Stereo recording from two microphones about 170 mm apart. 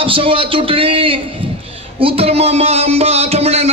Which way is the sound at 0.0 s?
30° right (ahead or behind).